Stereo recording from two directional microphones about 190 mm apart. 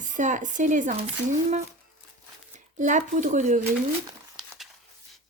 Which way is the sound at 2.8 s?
40° right (ahead or behind).